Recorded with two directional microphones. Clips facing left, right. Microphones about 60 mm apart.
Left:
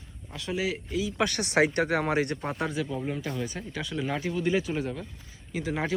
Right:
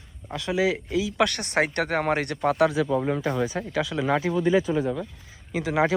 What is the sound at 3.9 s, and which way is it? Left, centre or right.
Speech, right.